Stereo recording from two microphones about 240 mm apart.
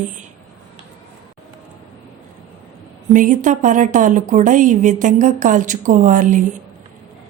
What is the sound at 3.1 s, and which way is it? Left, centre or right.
A woman's voice, right.